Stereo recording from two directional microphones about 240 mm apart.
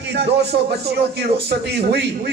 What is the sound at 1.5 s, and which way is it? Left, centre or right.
Speech, right.